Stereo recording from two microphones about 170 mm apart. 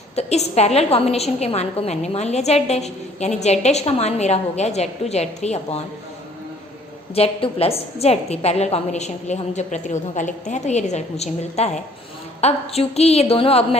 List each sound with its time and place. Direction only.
0.2 s a woman's voice: 40° left (ahead or behind)
7.1 s a woman's voice: 35° left (ahead or behind)